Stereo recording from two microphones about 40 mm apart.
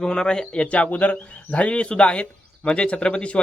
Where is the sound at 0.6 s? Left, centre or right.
Left.